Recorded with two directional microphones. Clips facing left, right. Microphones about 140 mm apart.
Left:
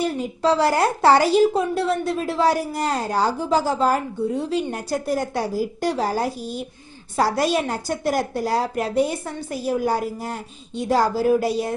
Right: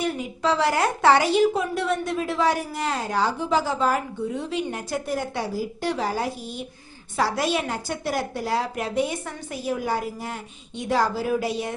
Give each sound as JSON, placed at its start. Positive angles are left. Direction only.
{"t": 0.0, "sound": "a woman's voice", "side_deg": 35}